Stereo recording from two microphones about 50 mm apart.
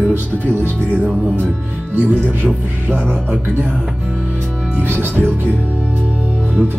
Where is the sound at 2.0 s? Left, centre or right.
Right.